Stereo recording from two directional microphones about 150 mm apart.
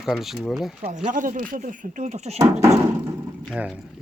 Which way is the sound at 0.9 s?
55° right (ahead or behind).